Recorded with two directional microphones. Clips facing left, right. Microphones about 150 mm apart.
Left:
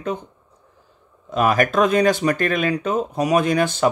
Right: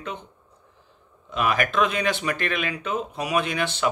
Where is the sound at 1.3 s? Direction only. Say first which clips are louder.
Left 6 dB; 40° left (ahead or behind).